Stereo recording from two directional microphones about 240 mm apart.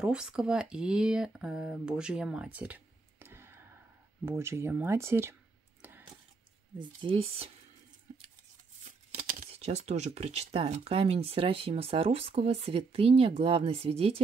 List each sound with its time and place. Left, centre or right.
0.0 s speech: centre
5.8 s a sound: centre
6.8 s speech: right
9.4 s speech: right